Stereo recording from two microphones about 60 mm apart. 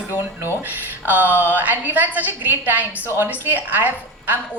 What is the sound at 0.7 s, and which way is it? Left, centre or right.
A woman's voice, right.